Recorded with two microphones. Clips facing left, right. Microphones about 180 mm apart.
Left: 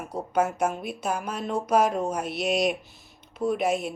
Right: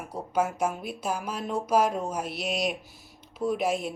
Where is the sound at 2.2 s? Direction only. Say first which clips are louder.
Left 4 dB; 55° left (ahead or behind).